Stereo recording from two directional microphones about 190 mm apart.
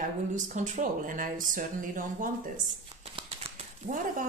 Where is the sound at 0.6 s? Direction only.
40° right (ahead or behind).